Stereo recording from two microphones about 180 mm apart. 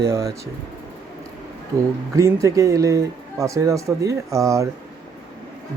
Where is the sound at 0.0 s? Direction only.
15° right (ahead or behind).